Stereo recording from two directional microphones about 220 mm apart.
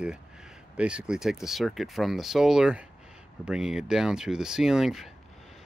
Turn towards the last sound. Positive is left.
turn(degrees=0)  # may be behind; listen again after turning